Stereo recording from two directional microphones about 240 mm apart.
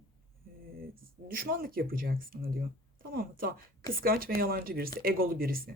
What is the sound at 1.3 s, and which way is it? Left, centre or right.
Speech, right.